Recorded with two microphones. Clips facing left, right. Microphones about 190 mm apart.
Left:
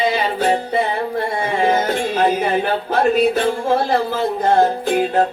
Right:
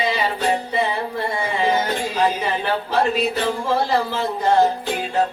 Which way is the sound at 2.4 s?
50° left (ahead or behind).